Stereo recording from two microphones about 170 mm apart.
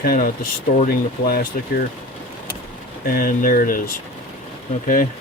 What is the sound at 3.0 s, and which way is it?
Speech, 60° left (ahead or behind).